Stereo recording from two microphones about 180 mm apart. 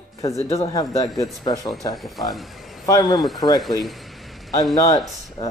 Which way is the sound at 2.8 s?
20° left (ahead or behind).